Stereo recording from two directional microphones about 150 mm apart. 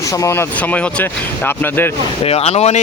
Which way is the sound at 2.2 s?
45° left (ahead or behind).